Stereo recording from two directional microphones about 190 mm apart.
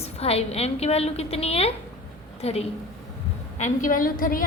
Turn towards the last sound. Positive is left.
turn(degrees=45)  # may be behind; listen again after turning